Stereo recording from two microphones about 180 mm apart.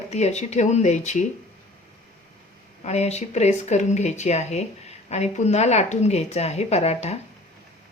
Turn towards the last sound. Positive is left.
turn(degrees=35)  # may be behind; listen again after turning